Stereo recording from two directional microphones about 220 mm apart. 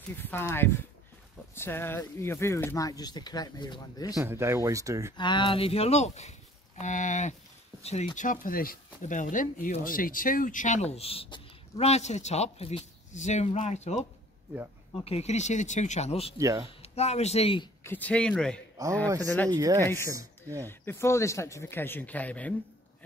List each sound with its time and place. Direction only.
0.2 s speech: 10° left (ahead or behind)
4.1 s speech: 10° right (ahead or behind)
5.1 s speech: 20° left (ahead or behind)
15.0 s speech: 30° left (ahead or behind)
16.3 s speech: 15° right (ahead or behind)
16.6 s speech: 30° left (ahead or behind)
17.8 s speech: 5° left (ahead or behind)
18.8 s speech: 15° right (ahead or behind)
19.2 s speech: 10° left (ahead or behind)
19.5 s speech: 15° right (ahead or behind)
19.8 s speech: 10° left (ahead or behind)
20.1 s a woman's voice: 15° right (ahead or behind)
20.6 s speech: 10° left (ahead or behind)